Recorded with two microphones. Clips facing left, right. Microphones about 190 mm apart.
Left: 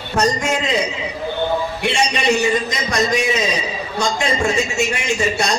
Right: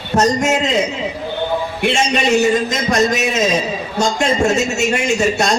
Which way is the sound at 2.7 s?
45° right (ahead or behind).